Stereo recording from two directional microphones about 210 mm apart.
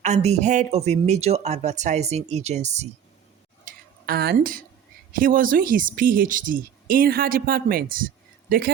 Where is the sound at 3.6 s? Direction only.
45° right (ahead or behind).